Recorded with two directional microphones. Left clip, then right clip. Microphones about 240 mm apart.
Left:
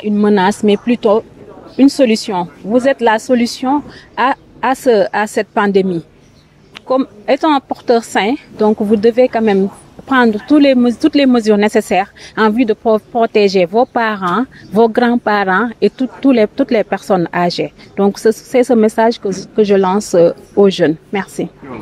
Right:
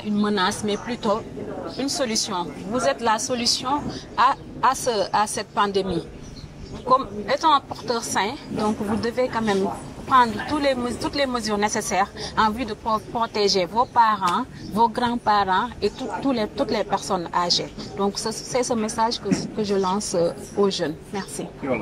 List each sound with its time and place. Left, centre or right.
0.2 s speech: left